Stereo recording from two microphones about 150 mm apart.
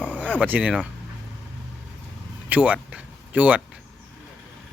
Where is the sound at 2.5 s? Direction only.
10° right (ahead or behind).